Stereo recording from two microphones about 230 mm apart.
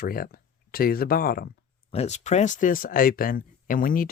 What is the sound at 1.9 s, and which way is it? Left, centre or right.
Speech, left.